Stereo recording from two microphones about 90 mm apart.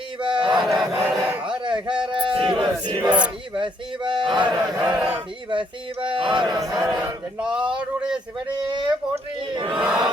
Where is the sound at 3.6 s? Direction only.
65° right (ahead or behind).